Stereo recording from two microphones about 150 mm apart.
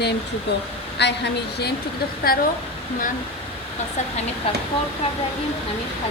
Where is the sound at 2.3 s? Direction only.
80° left.